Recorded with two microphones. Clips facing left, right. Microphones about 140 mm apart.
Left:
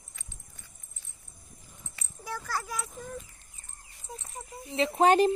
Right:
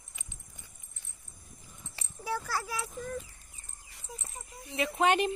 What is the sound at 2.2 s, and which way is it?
Speech, 10° right (ahead or behind).